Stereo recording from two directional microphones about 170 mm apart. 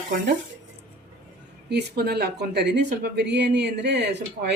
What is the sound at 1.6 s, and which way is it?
Speech, 70° right (ahead or behind).